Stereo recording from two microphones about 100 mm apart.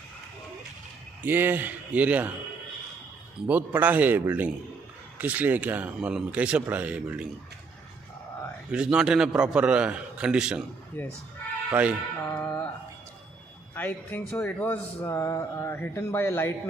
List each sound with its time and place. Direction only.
1.2 s speech: 20° right (ahead or behind)
3.4 s speech: 15° right (ahead or behind)
8.7 s speech: 10° right (ahead or behind)
11.0 s speech: 20° left (ahead or behind)
11.7 s speech: 15° right (ahead or behind)
12.2 s music: 20° left (ahead or behind)
13.7 s speech: 20° left (ahead or behind)
15.0 s speech: 30° left (ahead or behind)